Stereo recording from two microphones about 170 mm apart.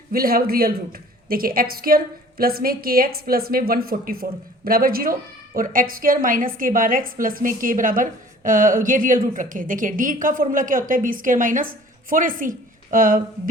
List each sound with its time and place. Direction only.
0.1 s a woman's voice: 60° right (ahead or behind)